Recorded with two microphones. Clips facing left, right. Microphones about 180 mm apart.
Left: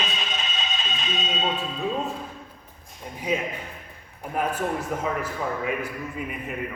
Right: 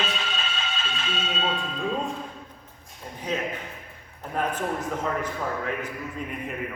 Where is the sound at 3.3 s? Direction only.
10° left (ahead or behind).